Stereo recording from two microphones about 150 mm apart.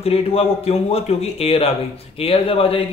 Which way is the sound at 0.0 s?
40° left (ahead or behind).